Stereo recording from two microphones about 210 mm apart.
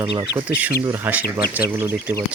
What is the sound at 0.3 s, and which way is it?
Speech, 5° right (ahead or behind).